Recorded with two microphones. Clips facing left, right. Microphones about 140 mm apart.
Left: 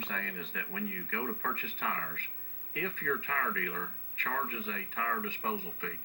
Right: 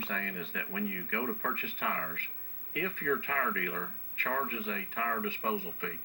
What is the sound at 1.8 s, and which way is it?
Speech, 40° right (ahead or behind).